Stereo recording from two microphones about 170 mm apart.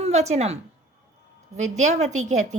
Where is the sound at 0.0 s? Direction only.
40° right (ahead or behind).